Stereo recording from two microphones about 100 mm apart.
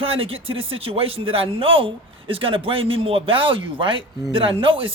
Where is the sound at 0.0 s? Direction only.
70° right (ahead or behind).